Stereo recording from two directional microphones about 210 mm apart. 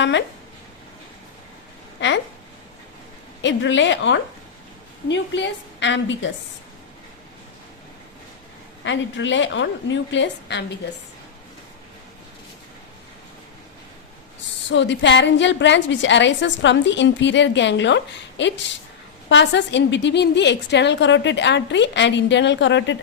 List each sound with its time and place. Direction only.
0.0 s a woman's voice: 60° left (ahead or behind)
2.0 s speech: 60° left (ahead or behind)
3.4 s a woman's voice: 60° left (ahead or behind)
8.8 s a woman's voice: 60° left (ahead or behind)
14.7 s a woman's voice: 60° left (ahead or behind)